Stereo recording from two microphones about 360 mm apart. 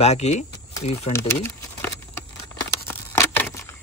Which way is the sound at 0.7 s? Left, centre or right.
Centre.